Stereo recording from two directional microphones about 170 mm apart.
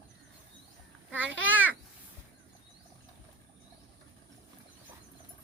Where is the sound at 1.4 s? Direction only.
10° right (ahead or behind).